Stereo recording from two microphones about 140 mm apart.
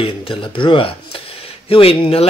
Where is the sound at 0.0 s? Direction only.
40° left (ahead or behind).